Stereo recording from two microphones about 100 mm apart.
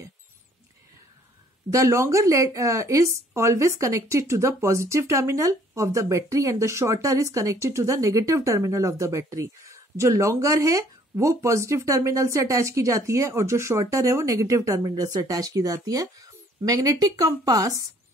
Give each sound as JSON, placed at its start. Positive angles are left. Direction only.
{"t": 1.7, "sound": "speech", "side_deg": -30}